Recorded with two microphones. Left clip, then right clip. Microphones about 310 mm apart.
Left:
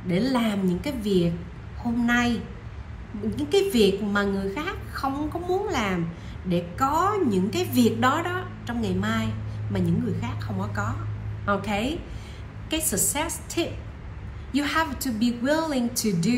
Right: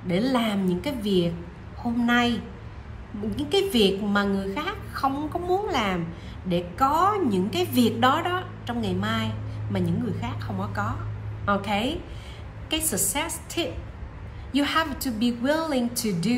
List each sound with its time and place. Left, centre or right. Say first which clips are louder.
0.1 s a woman's voice: right 1 dB; centre